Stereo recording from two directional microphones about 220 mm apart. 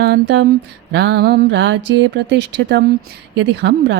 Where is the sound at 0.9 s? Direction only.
50° right (ahead or behind).